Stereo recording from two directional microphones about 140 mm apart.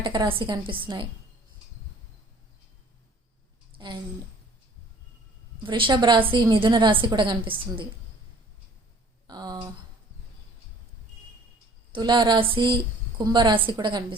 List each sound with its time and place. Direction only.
0.0 s a woman's voice: 35° right (ahead or behind)
3.8 s a sound: 30° right (ahead or behind)
5.6 s a woman's voice: 35° right (ahead or behind)
9.2 s speech: 30° right (ahead or behind)
11.9 s a woman's voice: 30° right (ahead or behind)